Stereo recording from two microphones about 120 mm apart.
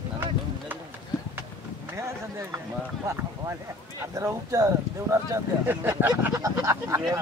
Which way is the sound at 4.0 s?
25° right (ahead or behind).